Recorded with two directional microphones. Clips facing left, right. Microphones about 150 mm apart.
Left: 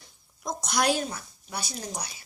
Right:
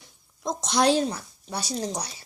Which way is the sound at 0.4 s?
25° right (ahead or behind).